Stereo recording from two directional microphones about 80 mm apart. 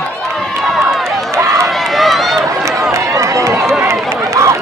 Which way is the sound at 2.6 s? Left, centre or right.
Right.